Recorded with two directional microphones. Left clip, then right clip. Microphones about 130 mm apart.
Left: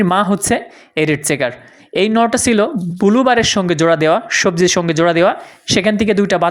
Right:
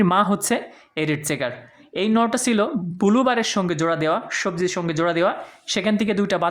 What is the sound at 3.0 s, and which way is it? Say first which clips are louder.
Speech: left 6 dB; 20° left (ahead or behind).